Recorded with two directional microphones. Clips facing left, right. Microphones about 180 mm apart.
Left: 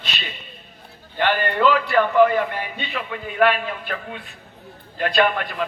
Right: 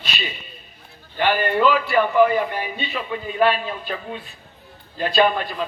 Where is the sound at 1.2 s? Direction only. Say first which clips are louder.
Right 1 dB; 10° right (ahead or behind).